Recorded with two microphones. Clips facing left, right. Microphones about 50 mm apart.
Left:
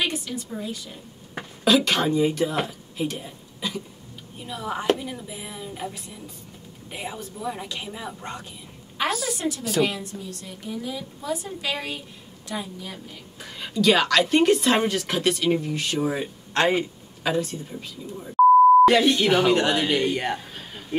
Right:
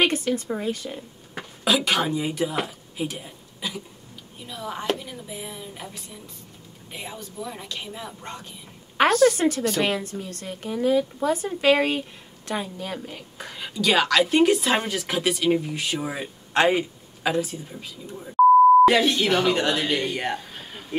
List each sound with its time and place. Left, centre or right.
0.0 s a woman's voice: right
1.6 s a woman's voice: centre
4.5 s speech: centre
9.0 s a woman's voice: right
9.8 s a woman's voice: right
13.6 s a woman's voice: centre